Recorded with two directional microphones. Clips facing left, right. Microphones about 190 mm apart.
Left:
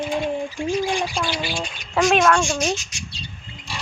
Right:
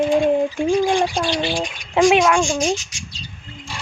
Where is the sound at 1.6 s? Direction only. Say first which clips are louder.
Right 4 dB; 15° right (ahead or behind).